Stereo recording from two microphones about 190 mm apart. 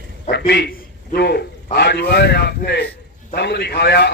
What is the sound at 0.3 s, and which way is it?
A man's voice, 60° left (ahead or behind).